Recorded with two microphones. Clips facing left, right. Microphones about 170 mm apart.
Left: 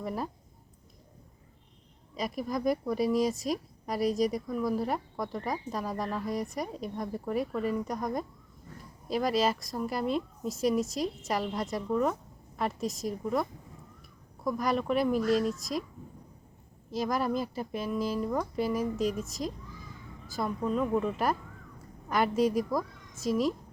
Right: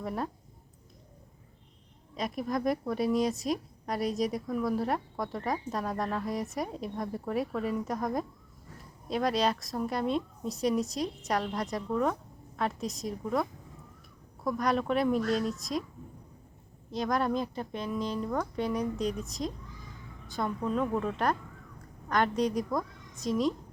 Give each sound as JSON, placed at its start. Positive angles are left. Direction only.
{"t": 0.0, "sound": "speech", "side_deg": 0}
{"t": 2.1, "sound": "speech", "side_deg": 0}
{"t": 16.9, "sound": "speech", "side_deg": 5}